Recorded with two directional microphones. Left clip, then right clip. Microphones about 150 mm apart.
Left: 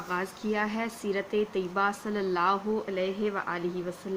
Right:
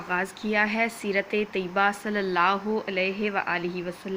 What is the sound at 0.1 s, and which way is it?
A woman's voice, 20° right (ahead or behind).